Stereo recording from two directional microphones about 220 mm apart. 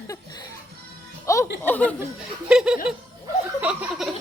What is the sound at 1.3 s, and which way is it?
Music, 15° left (ahead or behind).